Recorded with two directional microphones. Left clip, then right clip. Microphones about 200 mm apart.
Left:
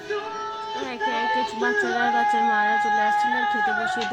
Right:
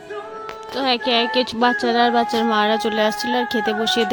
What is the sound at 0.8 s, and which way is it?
Speech, 40° right (ahead or behind).